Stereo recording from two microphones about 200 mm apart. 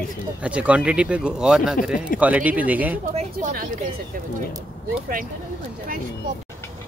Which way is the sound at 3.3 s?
45° right (ahead or behind).